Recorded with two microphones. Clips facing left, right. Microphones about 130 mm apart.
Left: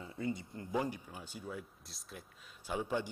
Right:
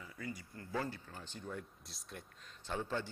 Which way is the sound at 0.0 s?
25° left (ahead or behind).